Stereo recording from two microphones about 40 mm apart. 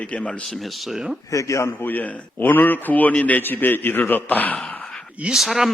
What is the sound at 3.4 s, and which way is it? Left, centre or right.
A man's voice, left.